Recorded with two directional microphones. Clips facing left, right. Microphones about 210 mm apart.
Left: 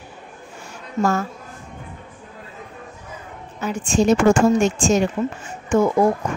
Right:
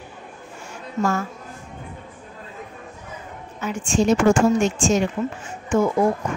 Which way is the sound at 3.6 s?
40° left (ahead or behind).